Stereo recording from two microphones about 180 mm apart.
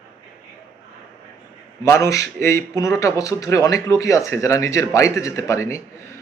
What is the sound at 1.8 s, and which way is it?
A man's voice, 15° left (ahead or behind).